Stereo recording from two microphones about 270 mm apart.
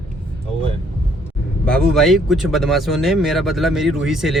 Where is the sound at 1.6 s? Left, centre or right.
Centre.